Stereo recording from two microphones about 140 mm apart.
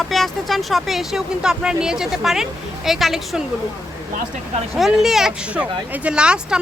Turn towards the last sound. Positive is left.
turn(degrees=-5)  # may be behind; listen again after turning